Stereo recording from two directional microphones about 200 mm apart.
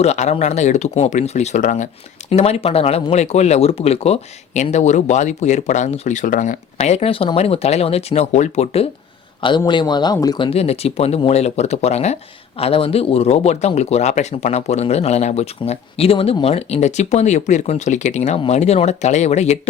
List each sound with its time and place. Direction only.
0.0 s speech: 35° left (ahead or behind)
9.6 s speech: 20° left (ahead or behind)